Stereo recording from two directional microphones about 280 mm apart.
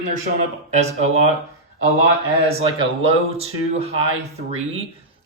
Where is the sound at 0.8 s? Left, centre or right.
Right.